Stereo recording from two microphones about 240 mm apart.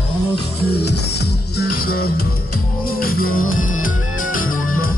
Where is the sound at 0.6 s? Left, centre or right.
Left.